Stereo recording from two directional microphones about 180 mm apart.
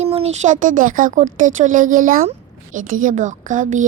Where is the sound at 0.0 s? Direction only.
35° right (ahead or behind).